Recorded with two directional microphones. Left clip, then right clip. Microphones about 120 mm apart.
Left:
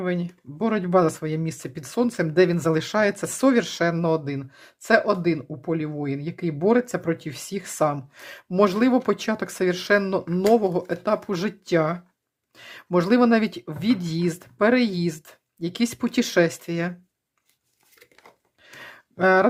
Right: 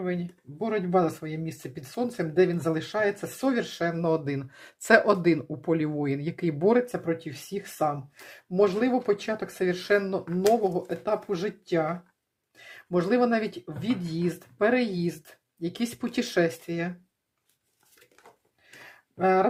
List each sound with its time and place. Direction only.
0.0 s speech: 45° left (ahead or behind)
4.2 s speech: 5° left (ahead or behind)
6.8 s speech: 35° left (ahead or behind)
12.5 s speech: 30° left (ahead or behind)
18.8 s a sound: 40° left (ahead or behind)